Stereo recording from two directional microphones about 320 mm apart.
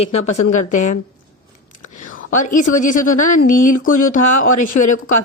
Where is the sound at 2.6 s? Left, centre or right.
Left.